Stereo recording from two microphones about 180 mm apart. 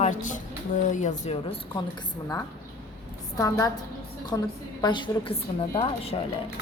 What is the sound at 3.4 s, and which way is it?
A woman's voice, 15° left (ahead or behind).